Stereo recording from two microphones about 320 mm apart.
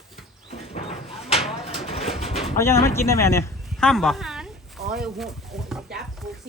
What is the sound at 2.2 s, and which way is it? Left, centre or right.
Pigeon, centre.